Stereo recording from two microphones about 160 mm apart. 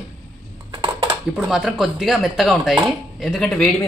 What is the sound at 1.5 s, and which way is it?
Speech, centre (ahead or behind).